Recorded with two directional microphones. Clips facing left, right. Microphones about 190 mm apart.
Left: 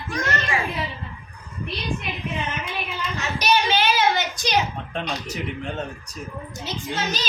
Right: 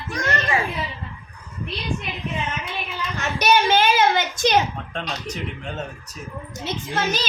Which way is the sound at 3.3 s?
50° right (ahead or behind).